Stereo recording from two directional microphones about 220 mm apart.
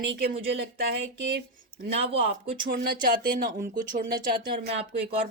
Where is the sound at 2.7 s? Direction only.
40° right (ahead or behind).